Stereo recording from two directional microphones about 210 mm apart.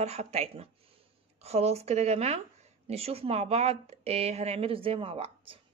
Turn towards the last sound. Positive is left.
turn(degrees=-25)  # may be behind; listen again after turning